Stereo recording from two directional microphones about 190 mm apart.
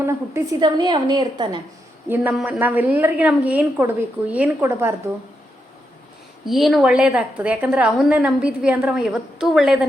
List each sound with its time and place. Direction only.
0.0 s a woman's voice: 20° right (ahead or behind)
2.0 s a woman's voice: 10° right (ahead or behind)
6.4 s a woman's voice: centre (ahead or behind)